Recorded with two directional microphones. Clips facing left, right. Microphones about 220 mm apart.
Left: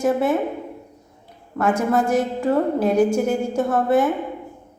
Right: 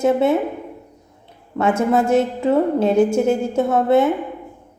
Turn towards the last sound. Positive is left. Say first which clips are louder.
# right 3 dB
turn(degrees=-25)  # may be behind; listen again after turning